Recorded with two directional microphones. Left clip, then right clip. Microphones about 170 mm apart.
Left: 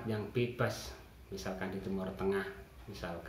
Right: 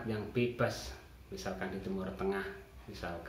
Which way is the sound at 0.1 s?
15° left (ahead or behind).